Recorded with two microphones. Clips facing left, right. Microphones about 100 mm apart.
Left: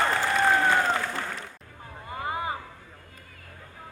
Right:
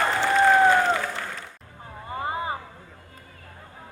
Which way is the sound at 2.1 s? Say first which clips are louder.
Right 2 dB; 30° right (ahead or behind).